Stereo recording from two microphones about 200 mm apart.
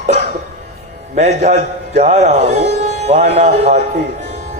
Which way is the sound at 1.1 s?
35° right (ahead or behind).